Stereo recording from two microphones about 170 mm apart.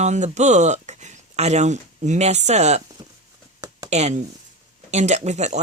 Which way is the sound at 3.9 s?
40° right (ahead or behind).